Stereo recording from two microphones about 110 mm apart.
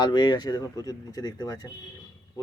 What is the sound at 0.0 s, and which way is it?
Speech, 40° left (ahead or behind).